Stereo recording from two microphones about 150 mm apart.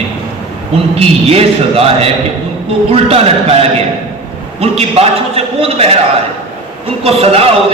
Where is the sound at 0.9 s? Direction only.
40° right (ahead or behind).